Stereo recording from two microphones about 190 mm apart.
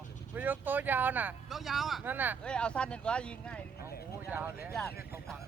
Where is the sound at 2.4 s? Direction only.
5° left (ahead or behind).